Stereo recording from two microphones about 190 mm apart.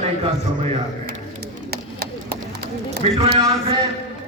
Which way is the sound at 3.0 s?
30° right (ahead or behind).